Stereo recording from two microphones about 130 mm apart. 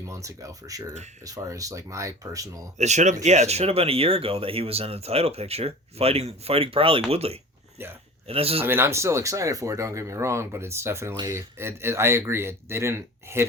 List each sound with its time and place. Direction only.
0.1 s speech: 25° right (ahead or behind)
2.7 s speech: 65° right (ahead or behind)
7.8 s speech: 15° right (ahead or behind)
8.3 s speech: 50° right (ahead or behind)
8.6 s speech: 15° right (ahead or behind)